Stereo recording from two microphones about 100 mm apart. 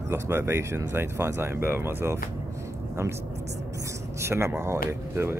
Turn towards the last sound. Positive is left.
turn(degrees=-25)  # may be behind; listen again after turning